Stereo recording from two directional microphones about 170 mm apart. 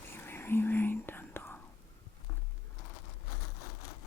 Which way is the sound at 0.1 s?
15° left (ahead or behind).